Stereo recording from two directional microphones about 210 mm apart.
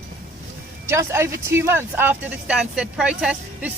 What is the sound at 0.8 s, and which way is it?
Speech, 15° right (ahead or behind).